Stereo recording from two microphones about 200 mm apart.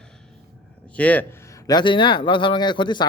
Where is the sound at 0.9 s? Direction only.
5° left (ahead or behind).